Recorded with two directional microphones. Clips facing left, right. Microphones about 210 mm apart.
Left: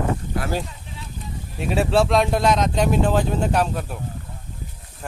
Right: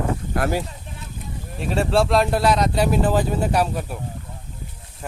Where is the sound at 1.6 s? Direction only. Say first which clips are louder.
Left 1 dB; centre (ahead or behind).